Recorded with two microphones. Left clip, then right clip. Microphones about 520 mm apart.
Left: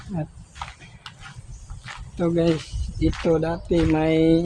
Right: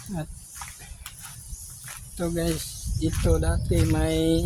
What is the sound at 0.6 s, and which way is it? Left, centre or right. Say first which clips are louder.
Horse: left 6 dB; right.